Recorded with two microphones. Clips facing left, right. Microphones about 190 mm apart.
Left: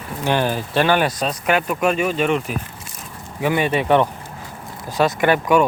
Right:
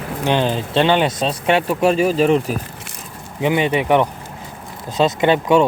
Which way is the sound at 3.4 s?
20° right (ahead or behind).